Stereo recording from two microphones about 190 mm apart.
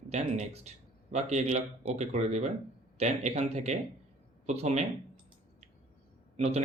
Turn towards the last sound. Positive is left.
turn(degrees=-35)  # may be behind; listen again after turning